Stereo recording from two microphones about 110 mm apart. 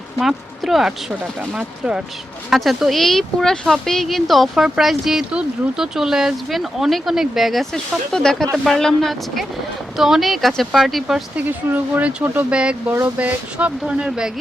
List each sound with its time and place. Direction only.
0.2 s speech: centre (ahead or behind)
11.3 s speech: 15° right (ahead or behind)